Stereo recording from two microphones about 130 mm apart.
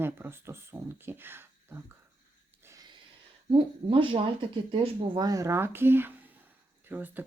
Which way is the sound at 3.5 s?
45° right (ahead or behind).